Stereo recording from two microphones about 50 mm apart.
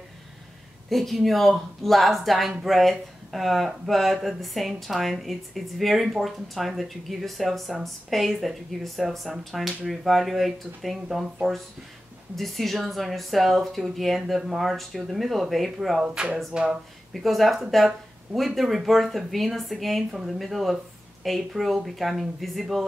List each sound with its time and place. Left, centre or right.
0.8 s speech: centre
12.4 s speech: centre
16.5 s speech: centre
17.1 s speech: centre